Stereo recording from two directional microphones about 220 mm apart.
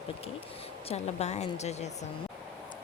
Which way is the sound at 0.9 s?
30° left (ahead or behind).